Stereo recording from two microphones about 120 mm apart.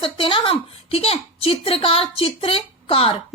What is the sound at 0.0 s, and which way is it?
Speech, 45° left (ahead or behind).